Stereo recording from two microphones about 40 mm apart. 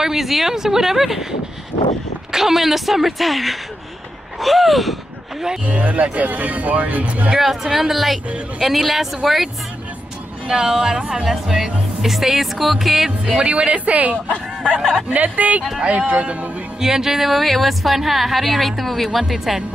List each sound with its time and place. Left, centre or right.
0.0 s speech: centre
2.3 s a woman's voice: centre
5.7 s speech: right
7.3 s a woman's voice: centre
10.5 s a woman's voice: centre
13.4 s speech: right
14.8 s speech: centre
15.0 s speech: right
16.8 s a woman's voice: centre